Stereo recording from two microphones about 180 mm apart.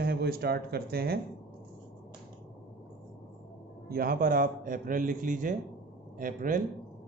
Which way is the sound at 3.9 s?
55° right (ahead or behind).